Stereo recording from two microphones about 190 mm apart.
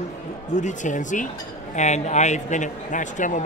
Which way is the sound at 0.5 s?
40° left (ahead or behind).